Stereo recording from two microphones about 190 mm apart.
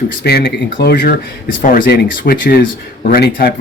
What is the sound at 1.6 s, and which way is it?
Speech, 50° left (ahead or behind).